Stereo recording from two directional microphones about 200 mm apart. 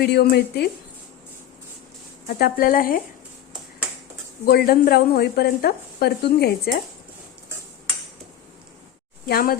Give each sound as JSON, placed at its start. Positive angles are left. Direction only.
{"t": 0.0, "sound": "a woman's voice", "side_deg": 55}
{"t": 2.2, "sound": "a woman's voice", "side_deg": 50}
{"t": 4.4, "sound": "a woman's voice", "side_deg": 50}
{"t": 9.2, "sound": "a woman's voice", "side_deg": 45}